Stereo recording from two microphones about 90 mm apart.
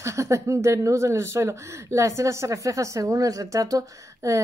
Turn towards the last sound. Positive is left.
turn(degrees=-35)  # may be behind; listen again after turning